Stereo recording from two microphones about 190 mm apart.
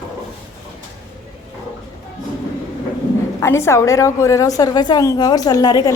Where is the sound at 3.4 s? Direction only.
15° left (ahead or behind).